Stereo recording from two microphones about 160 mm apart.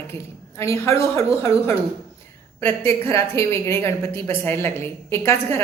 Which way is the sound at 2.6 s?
15° left (ahead or behind).